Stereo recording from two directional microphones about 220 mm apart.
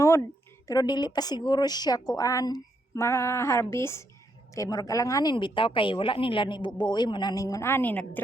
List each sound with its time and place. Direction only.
0.7 s a woman's voice: 20° left (ahead or behind)